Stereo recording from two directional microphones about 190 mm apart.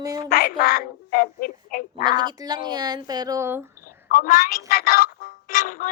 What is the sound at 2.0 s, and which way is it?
Speech, 25° right (ahead or behind).